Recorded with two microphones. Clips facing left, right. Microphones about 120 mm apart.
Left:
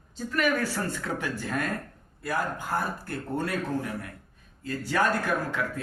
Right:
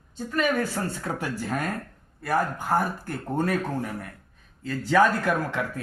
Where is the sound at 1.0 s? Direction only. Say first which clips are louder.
Right 2 dB; 40° right (ahead or behind).